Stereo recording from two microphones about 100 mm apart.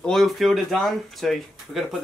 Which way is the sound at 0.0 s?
Centre (ahead or behind).